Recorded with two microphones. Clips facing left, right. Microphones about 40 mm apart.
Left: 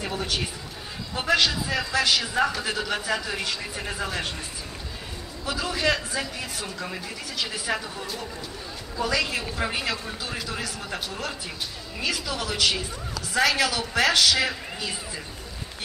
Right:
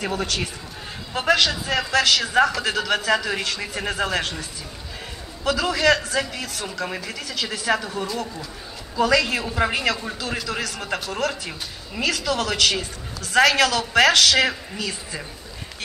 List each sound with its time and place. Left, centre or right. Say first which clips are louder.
0.0 s a man's voice: right 3 dB; right
5.4 s a man's voice: right 6 dB; right